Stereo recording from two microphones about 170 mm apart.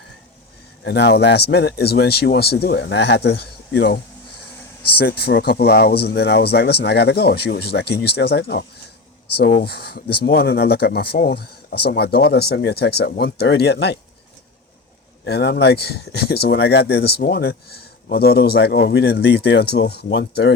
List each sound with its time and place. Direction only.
0.9 s speech: 80° left
9.6 s speech: 70° left (ahead or behind)
15.3 s speech: 80° left